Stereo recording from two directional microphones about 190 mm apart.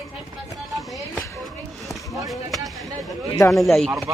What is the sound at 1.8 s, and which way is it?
Basketball bounce, centre (ahead or behind).